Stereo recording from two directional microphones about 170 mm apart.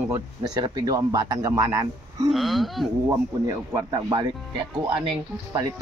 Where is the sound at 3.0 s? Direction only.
20° right (ahead or behind).